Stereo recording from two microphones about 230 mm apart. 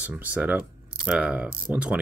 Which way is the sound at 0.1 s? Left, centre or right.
Centre.